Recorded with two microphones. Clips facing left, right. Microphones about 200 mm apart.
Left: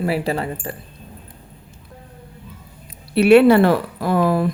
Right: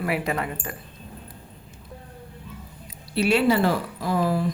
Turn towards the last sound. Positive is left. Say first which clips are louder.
# left 6 dB
turn(degrees=60)  # may be behind; listen again after turning